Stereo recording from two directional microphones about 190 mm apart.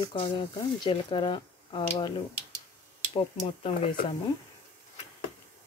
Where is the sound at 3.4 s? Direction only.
30° left (ahead or behind).